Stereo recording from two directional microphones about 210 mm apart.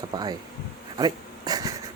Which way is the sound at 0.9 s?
20° right (ahead or behind).